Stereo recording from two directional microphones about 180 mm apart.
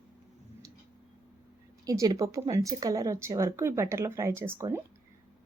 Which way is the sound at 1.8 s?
20° right (ahead or behind).